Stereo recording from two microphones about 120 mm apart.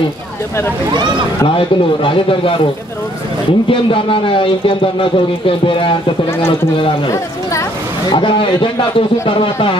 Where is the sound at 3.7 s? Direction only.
45° left (ahead or behind).